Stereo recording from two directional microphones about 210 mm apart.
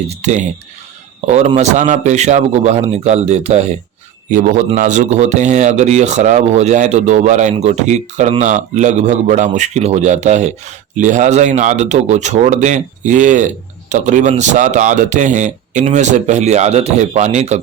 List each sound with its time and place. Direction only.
0.1 s a man's voice: 35° right (ahead or behind)